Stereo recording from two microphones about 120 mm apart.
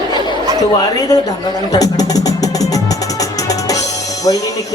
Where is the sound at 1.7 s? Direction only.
30° left (ahead or behind).